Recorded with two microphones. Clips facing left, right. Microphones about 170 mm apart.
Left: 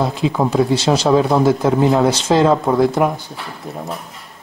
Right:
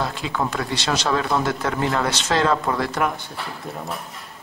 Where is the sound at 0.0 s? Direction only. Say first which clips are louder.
Left 7 dB; centre (ahead or behind).